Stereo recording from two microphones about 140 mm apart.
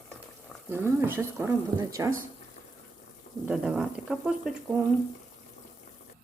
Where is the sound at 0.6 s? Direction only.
15° right (ahead or behind).